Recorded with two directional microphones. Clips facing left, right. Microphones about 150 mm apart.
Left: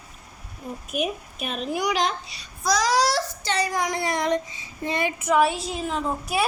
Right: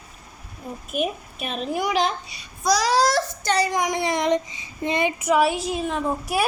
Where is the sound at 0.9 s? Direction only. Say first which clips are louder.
Right 2 dB; centre (ahead or behind).